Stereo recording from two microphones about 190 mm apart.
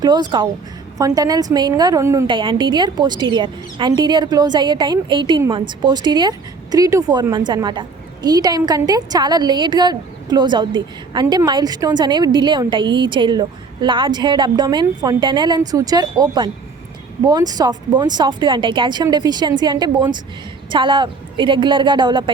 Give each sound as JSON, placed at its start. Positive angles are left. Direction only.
{"t": 0.0, "sound": "speech", "side_deg": -20}